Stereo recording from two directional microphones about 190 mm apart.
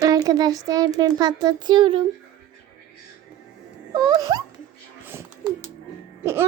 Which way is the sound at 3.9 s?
20° right (ahead or behind).